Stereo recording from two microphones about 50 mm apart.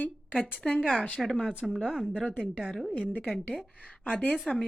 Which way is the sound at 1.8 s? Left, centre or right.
Centre.